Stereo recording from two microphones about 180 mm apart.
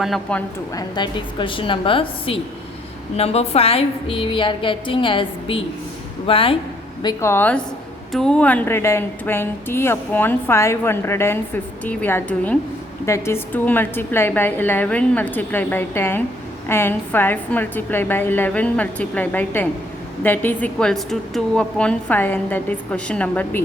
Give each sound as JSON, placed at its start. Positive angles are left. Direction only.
{"t": 0.0, "sound": "a woman's voice", "side_deg": 5}
{"t": 0.7, "sound": "a woman's voice", "side_deg": 20}
{"t": 7.0, "sound": "a woman's voice", "side_deg": 20}